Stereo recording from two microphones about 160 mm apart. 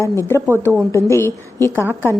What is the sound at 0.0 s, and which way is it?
A woman's voice, 20° left (ahead or behind).